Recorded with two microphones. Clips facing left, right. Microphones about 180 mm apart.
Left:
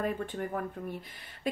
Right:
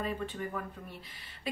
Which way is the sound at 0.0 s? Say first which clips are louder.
Left 3 dB; 50° left (ahead or behind).